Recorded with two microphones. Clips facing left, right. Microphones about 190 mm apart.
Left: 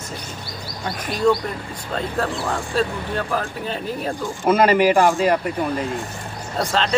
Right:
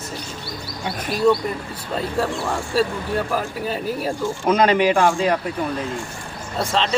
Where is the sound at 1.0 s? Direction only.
5° right (ahead or behind).